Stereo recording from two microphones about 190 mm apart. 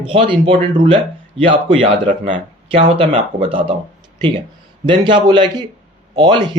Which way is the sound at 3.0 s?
30° right (ahead or behind).